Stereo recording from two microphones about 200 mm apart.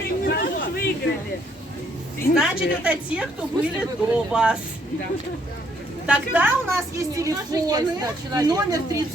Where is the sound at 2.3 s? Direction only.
5° right (ahead or behind).